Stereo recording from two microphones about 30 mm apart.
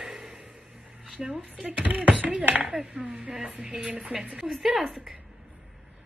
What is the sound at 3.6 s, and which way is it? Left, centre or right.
Speech, right.